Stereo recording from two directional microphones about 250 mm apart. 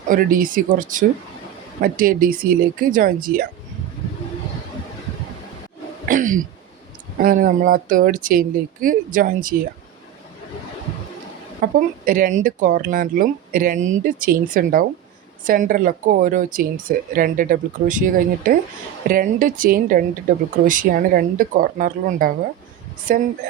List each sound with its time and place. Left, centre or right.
0.1 s speech: right
6.1 s speech: right
11.6 s speech: right